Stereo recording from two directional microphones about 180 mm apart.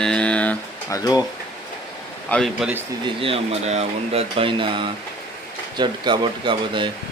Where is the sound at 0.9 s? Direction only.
20° left (ahead or behind).